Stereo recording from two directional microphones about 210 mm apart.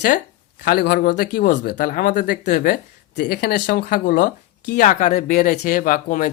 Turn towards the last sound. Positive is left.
turn(degrees=40)  # may be behind; listen again after turning